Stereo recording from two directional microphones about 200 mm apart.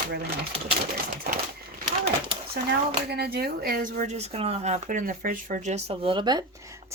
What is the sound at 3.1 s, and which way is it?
Speech, 55° right (ahead or behind).